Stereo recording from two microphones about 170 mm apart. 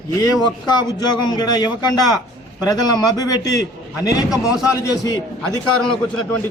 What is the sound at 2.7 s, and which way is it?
Speech, 25° left (ahead or behind).